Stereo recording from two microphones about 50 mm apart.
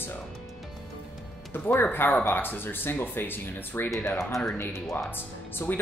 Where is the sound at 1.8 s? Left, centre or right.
Left.